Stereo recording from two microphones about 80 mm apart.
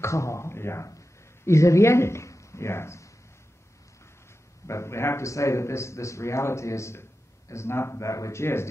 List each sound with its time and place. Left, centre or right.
0.0 s a man's voice: left
4.6 s a man's voice: left